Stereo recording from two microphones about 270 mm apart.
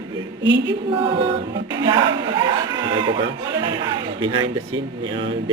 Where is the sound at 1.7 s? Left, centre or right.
Centre.